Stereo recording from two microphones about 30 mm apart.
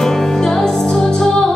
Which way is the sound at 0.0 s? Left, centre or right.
Centre.